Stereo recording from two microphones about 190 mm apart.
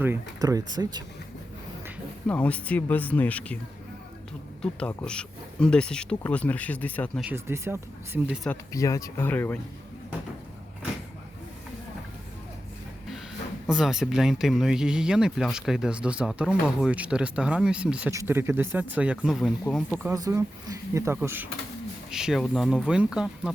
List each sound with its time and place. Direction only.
0.0 s speech: 15° right (ahead or behind)
2.2 s speech: 5° left (ahead or behind)
4.6 s speech: 5° left (ahead or behind)
7.2 s speech: 10° right (ahead or behind)
8.4 s speech: 15° left (ahead or behind)
13.7 s speech: 5° right (ahead or behind)